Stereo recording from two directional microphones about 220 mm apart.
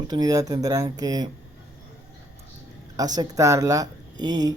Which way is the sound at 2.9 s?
15° right (ahead or behind).